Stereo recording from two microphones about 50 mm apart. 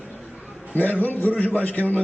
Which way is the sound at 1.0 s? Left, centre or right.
Left.